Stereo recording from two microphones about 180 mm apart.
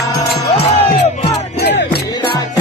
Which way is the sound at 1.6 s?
70° left (ahead or behind).